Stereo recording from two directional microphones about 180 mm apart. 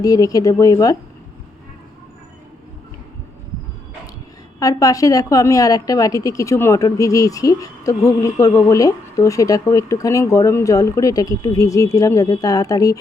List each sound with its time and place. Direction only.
0.0 s a woman's voice: 20° left (ahead or behind)
4.6 s a woman's voice: 20° left (ahead or behind)